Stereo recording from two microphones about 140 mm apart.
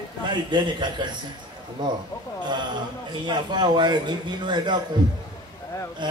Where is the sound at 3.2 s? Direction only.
30° right (ahead or behind).